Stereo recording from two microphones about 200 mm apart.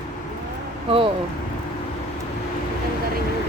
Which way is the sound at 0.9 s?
25° right (ahead or behind).